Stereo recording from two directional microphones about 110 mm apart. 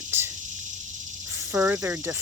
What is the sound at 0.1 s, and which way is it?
Cricket, 20° right (ahead or behind).